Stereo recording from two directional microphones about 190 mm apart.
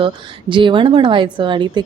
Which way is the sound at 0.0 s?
25° right (ahead or behind).